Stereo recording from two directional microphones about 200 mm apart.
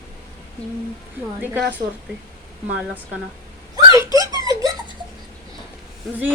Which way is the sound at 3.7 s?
15° right (ahead or behind).